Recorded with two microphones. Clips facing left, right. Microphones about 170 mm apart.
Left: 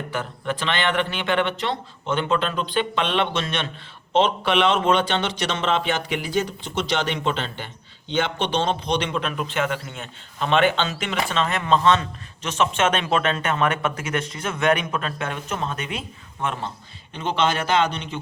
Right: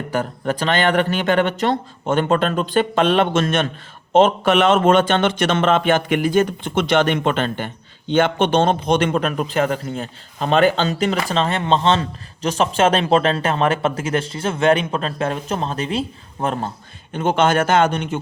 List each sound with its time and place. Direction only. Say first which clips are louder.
0.1 s a man's voice: right 7 dB; 40° right (ahead or behind)